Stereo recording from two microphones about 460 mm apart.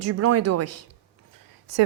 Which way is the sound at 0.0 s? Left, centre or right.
Right.